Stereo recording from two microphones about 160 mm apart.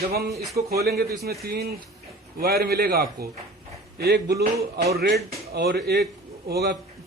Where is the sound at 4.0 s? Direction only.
90° right.